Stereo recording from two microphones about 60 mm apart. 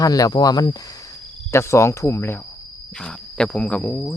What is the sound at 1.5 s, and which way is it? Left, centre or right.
Speech, left.